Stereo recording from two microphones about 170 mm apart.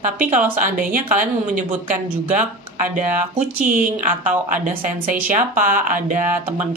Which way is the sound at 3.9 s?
45° right (ahead or behind).